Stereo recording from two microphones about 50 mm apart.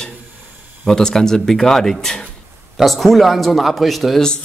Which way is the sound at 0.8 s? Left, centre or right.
Centre.